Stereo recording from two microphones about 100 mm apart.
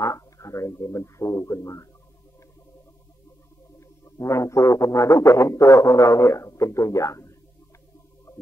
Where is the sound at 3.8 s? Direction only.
30° left (ahead or behind).